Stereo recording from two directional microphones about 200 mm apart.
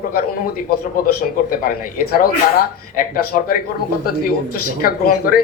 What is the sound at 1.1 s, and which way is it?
Speech, 45° left (ahead or behind).